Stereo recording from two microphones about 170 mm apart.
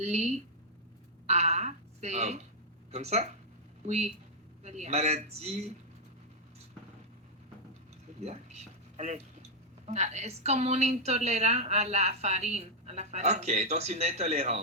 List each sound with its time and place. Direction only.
0.0 s a woman's voice: 40° right (ahead or behind)
8.2 s a woman's voice: 40° right (ahead or behind)